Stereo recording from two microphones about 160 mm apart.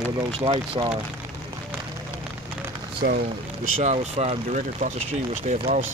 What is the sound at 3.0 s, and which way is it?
Speech, 65° right (ahead or behind).